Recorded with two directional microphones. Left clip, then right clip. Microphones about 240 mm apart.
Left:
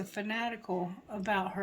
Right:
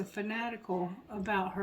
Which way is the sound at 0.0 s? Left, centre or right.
Left.